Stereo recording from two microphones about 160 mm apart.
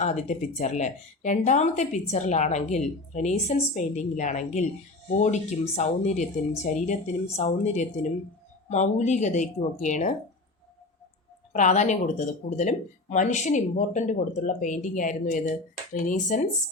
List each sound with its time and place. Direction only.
0.0 s speech: 45° left (ahead or behind)
11.5 s speech: 50° left (ahead or behind)